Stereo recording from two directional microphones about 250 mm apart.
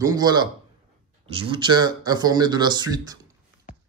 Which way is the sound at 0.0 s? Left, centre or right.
Centre.